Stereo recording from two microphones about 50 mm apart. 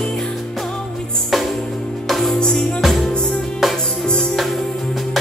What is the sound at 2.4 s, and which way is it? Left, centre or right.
Music, centre.